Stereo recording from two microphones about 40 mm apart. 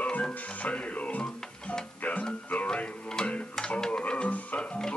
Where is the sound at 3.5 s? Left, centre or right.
Centre.